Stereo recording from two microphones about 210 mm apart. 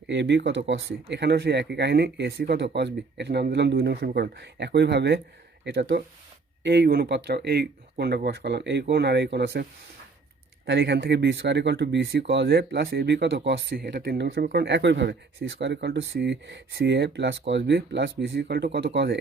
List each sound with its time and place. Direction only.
0.1 s speech: 55° right (ahead or behind)
10.7 s speech: 55° right (ahead or behind)